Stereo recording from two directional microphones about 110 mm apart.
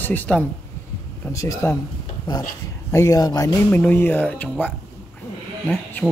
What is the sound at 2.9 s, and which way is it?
Speech, 30° left (ahead or behind).